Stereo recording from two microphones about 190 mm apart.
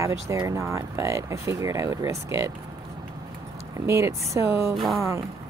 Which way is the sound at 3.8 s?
15° right (ahead or behind).